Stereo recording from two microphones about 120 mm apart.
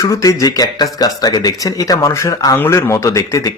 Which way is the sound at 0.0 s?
30° left (ahead or behind).